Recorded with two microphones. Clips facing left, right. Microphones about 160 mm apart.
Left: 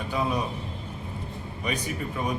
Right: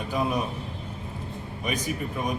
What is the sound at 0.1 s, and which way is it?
Speech, 10° right (ahead or behind).